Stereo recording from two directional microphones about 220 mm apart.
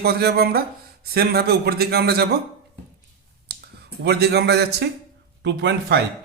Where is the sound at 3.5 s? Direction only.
50° right (ahead or behind).